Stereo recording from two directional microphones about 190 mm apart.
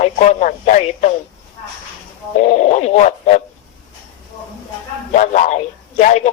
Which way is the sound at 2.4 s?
35° left (ahead or behind).